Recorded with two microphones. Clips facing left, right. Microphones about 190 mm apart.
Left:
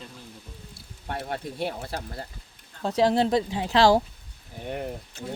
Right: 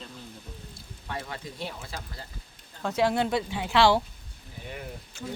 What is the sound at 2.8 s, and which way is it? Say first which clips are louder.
Speech: left 3 dB; 35° left (ahead or behind).